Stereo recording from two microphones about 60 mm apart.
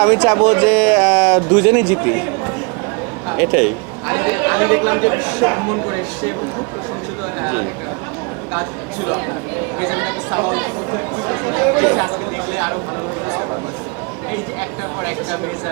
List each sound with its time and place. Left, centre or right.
0.0 s speech: centre
3.2 s speech: right
7.4 s speech: right
9.8 s speech: right